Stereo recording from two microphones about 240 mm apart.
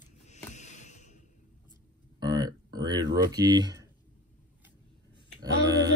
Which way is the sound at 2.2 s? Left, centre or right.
Centre.